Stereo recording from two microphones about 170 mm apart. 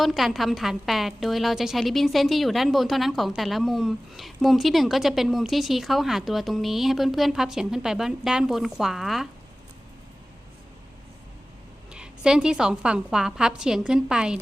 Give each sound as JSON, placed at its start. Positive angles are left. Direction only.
{"t": 0.0, "sound": "a woman's voice", "side_deg": 0}
{"t": 11.9, "sound": "a woman's voice", "side_deg": -5}